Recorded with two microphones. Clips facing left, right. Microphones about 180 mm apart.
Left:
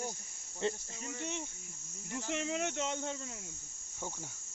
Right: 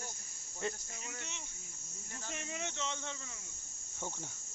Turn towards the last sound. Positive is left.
turn(degrees=45)  # may be behind; listen again after turning